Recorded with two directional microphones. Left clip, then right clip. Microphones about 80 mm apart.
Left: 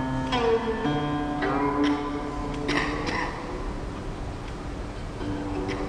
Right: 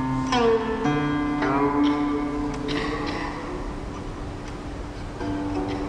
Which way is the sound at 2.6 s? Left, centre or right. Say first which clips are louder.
Left 3 dB; left.